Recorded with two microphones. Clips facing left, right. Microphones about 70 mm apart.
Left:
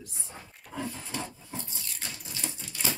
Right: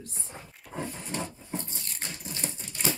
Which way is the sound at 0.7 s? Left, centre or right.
Right.